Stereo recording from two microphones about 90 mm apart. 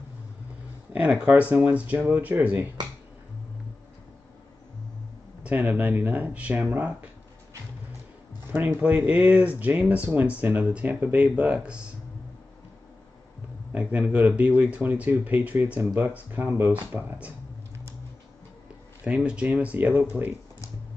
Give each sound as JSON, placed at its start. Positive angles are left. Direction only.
{"t": 0.9, "sound": "speech", "side_deg": -15}
{"t": 5.4, "sound": "speech", "side_deg": -20}
{"t": 8.5, "sound": "speech", "side_deg": -20}
{"t": 13.7, "sound": "speech", "side_deg": -15}
{"t": 19.0, "sound": "speech", "side_deg": -10}